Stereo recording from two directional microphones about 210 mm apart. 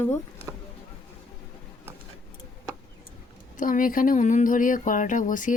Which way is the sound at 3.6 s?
40° left (ahead or behind).